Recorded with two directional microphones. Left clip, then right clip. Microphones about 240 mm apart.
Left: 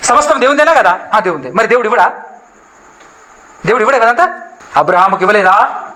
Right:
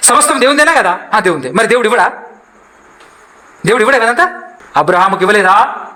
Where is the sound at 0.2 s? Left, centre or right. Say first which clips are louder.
Even; right.